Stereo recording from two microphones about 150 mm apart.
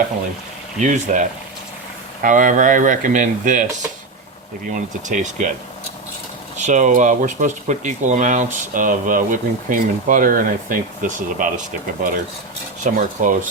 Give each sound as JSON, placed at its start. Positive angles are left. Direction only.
{"t": 0.8, "sound": "speech", "side_deg": -55}
{"t": 2.2, "sound": "speech", "side_deg": -60}
{"t": 4.7, "sound": "speech", "side_deg": -55}
{"t": 6.6, "sound": "speech", "side_deg": -55}
{"t": 12.8, "sound": "speech", "side_deg": -60}